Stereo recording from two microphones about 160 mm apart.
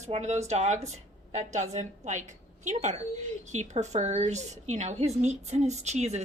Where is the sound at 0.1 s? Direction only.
45° right (ahead or behind).